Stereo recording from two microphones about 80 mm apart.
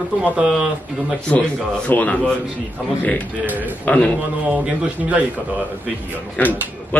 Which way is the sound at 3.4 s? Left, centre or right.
Right.